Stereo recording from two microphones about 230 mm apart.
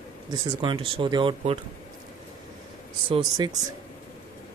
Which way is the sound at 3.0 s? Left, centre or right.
Right.